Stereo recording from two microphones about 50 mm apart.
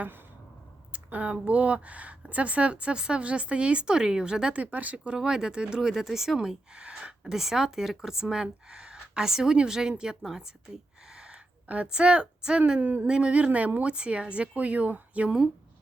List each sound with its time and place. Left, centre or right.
0.9 s speech: right
4.5 s speech: right
5.0 s speech: centre
5.9 s speech: centre
6.7 s speech: centre
11.1 s a sound: centre
11.7 s speech: right
13.8 s speech: right